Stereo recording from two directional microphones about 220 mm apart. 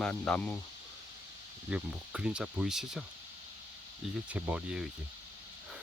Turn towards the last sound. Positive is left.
turn(degrees=-5)  # may be behind; listen again after turning